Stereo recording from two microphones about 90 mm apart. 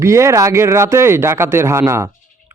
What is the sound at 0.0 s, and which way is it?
Speech, 35° right (ahead or behind).